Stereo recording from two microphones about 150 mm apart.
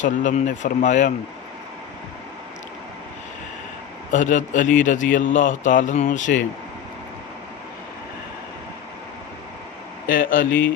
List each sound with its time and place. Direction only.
0.0 s a man's voice: 55° left (ahead or behind)
4.1 s a man's voice: 60° left (ahead or behind)
10.1 s speech: 65° left (ahead or behind)